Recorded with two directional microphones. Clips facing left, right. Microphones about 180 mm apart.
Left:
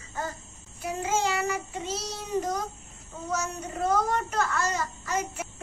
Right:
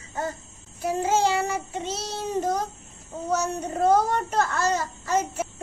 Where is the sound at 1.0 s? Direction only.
30° right (ahead or behind).